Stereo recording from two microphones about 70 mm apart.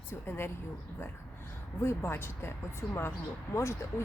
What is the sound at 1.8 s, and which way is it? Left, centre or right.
Speech, left.